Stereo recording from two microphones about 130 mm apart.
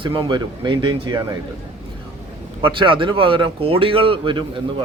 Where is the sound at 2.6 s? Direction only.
40° right (ahead or behind).